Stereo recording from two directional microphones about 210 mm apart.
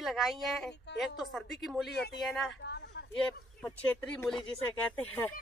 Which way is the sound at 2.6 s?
55° left (ahead or behind).